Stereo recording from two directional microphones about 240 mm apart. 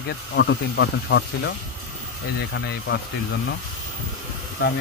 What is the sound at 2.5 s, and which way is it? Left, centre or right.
Speech, left.